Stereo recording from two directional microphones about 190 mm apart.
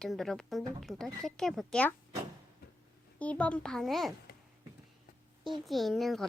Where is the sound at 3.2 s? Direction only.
5° left (ahead or behind).